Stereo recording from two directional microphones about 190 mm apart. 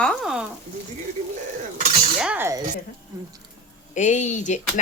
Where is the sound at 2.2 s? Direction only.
10° right (ahead or behind).